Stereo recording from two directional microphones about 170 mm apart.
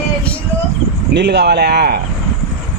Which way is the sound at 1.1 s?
80° right.